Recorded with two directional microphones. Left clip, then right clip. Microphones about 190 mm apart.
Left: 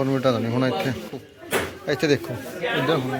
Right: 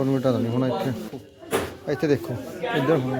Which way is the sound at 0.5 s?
5° right (ahead or behind).